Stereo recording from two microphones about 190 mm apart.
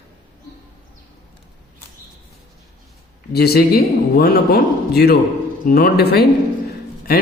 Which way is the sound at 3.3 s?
55° left (ahead or behind).